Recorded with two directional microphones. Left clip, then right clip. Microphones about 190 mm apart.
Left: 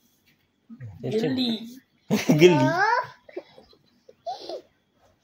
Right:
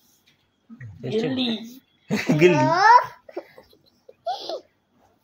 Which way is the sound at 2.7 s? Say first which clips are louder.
Right 8 dB; 5° right (ahead or behind).